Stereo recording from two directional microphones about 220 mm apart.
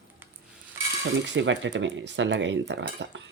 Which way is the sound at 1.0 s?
55° right (ahead or behind).